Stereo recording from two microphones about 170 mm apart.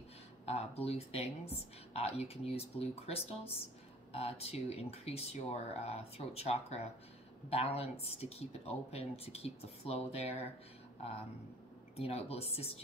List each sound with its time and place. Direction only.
0.5 s speech: 35° left (ahead or behind)
12.0 s speech: 35° left (ahead or behind)